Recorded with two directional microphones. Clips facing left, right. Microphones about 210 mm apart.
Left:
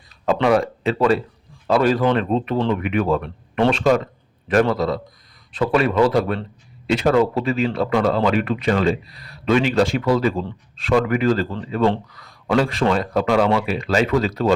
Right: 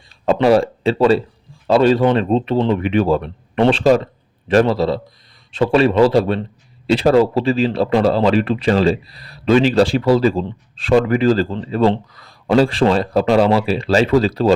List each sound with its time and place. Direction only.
0.3 s speech: 30° right (ahead or behind)